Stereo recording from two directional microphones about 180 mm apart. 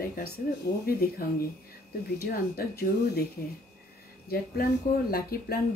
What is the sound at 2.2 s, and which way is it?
Speech, 60° left (ahead or behind).